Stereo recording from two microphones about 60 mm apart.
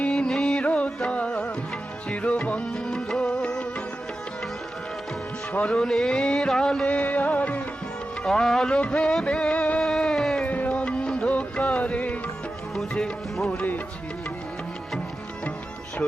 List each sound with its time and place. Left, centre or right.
0.0 s music: centre
5.5 s music: centre
6.8 s music: left
8.3 s music: centre
8.7 s music: centre
9.8 s a sound: centre
10.4 s music: left
12.7 s music: centre